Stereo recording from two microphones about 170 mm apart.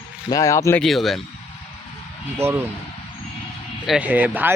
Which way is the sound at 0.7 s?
Centre (ahead or behind).